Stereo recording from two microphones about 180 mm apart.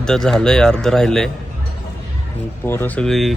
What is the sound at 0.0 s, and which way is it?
A man's voice, 5° left (ahead or behind).